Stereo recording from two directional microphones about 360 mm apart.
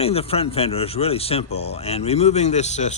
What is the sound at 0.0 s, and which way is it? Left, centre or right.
Speech, centre.